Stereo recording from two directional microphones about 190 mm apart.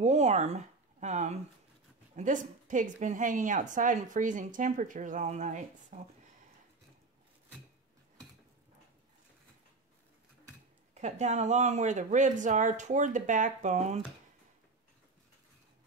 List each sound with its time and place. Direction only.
0.0 s a sound: 35° right (ahead or behind)
2.1 s a woman's voice: 45° right (ahead or behind)
11.0 s speech: 40° right (ahead or behind)